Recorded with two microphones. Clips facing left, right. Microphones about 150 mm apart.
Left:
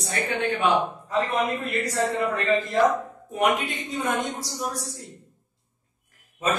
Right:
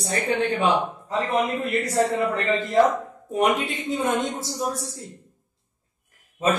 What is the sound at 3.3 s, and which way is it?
A woman's voice, 30° right (ahead or behind).